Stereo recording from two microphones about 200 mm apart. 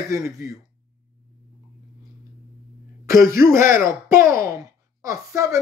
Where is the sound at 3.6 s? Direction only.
40° left (ahead or behind).